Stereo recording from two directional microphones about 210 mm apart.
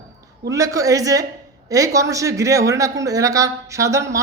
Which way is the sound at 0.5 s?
15° right (ahead or behind).